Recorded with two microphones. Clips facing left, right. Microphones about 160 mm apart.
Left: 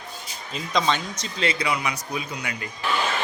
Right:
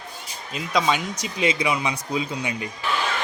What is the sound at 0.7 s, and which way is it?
A man's voice, 10° right (ahead or behind).